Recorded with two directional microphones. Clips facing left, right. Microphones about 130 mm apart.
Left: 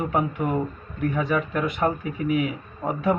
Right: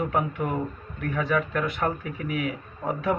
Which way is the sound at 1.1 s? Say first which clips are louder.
Right 1 dB; 20° left (ahead or behind).